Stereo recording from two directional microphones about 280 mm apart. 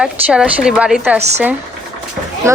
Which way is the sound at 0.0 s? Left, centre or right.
Centre.